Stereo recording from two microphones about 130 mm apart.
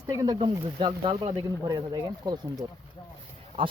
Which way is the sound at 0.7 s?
40° right (ahead or behind).